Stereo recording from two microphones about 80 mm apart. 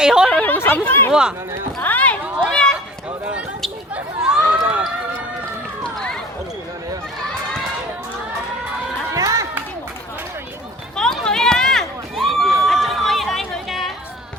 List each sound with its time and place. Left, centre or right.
0.0 s a sound: centre
0.3 s chatter: centre
1.8 s run: centre
2.5 s run: centre
3.9 s a sound: centre
9.1 s run: right
10.9 s run: centre
12.6 s music: centre